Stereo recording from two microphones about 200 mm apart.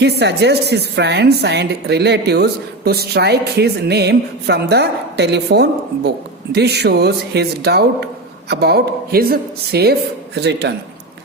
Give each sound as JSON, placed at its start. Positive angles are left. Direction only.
{"t": 0.0, "sound": "a woman's voice", "side_deg": -55}